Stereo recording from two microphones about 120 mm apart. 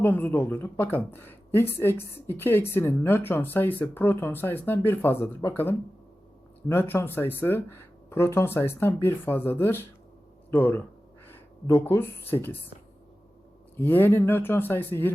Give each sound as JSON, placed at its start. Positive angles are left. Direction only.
{"t": 0.0, "sound": "speech", "side_deg": 15}
{"t": 13.7, "sound": "speech", "side_deg": 15}